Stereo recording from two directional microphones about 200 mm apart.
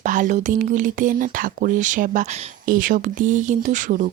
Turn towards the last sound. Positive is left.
turn(degrees=-40)  # may be behind; listen again after turning